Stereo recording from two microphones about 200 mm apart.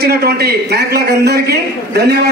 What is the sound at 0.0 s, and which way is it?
A man's voice, 50° right (ahead or behind).